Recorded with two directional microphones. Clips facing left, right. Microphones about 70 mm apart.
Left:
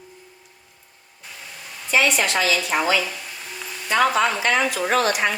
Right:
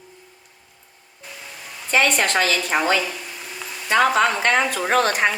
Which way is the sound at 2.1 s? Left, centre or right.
Right.